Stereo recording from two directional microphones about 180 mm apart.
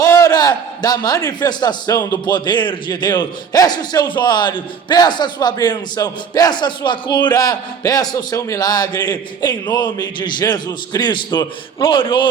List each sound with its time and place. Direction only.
0.0 s a man's voice: 20° left (ahead or behind)